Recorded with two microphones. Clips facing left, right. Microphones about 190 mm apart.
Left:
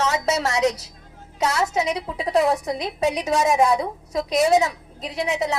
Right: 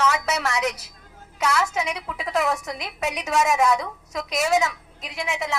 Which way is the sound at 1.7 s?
35° left (ahead or behind).